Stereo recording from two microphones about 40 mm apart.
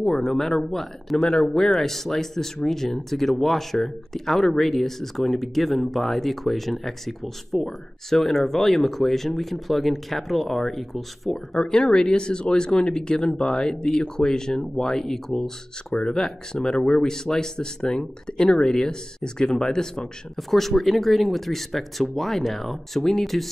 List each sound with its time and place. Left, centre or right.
0.0 s speech: centre
11.6 s speech: centre
20.3 s speech: centre